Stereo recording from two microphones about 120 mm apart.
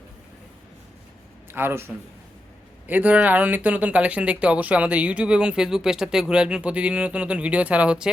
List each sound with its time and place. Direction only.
1.5 s a man's voice: 20° right (ahead or behind)